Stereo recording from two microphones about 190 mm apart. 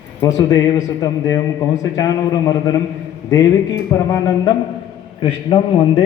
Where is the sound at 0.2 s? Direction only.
20° left (ahead or behind).